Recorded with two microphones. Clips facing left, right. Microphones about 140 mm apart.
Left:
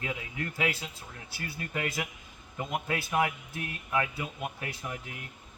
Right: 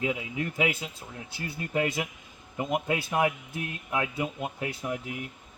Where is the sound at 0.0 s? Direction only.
15° right (ahead or behind).